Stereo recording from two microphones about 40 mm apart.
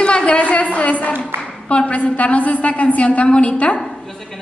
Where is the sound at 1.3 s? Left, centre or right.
Right.